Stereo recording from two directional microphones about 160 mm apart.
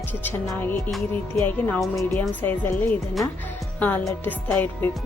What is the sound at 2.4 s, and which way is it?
Speech, 10° left (ahead or behind).